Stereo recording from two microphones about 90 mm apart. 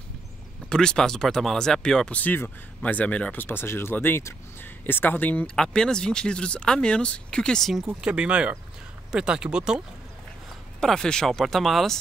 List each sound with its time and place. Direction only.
0.7 s speech: 10° left (ahead or behind)
5.6 s speech: 5° left (ahead or behind)
8.0 s speech: 10° right (ahead or behind)
10.8 s speech: 5° left (ahead or behind)